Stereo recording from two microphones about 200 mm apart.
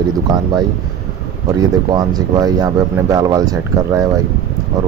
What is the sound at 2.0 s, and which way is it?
Speech, 20° right (ahead or behind).